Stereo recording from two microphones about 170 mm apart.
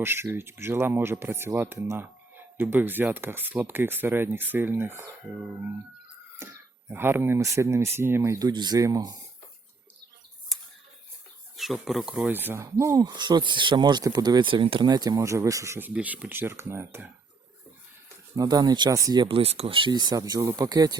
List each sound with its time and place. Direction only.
0.0 s speech: 15° right (ahead or behind)
6.4 s speech: 15° right (ahead or behind)
10.5 s a sound: centre (ahead or behind)
11.5 s speech: centre (ahead or behind)
18.3 s speech: 20° right (ahead or behind)